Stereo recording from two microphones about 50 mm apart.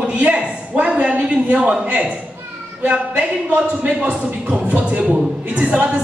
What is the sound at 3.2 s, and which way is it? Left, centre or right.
Speech, right.